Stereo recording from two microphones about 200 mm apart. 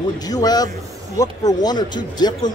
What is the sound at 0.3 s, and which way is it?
Speech, 20° left (ahead or behind).